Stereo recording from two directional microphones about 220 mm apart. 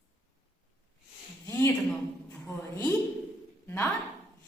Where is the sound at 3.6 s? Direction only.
10° left (ahead or behind).